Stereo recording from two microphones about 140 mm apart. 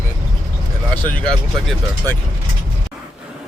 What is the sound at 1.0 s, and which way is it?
Speech, 10° left (ahead or behind).